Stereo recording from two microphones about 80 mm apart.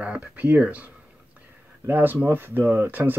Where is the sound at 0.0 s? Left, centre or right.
Centre.